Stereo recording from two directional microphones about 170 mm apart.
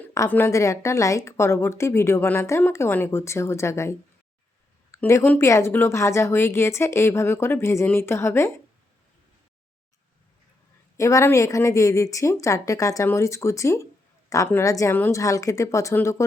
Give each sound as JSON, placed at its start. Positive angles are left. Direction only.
{"t": 0.1, "sound": "a woman's voice", "side_deg": 15}
{"t": 10.9, "sound": "a woman's voice", "side_deg": 20}